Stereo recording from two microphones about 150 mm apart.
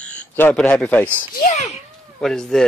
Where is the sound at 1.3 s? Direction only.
75° left (ahead or behind).